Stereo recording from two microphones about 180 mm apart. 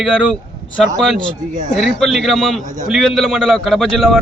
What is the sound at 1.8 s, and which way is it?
A man's voice, centre (ahead or behind).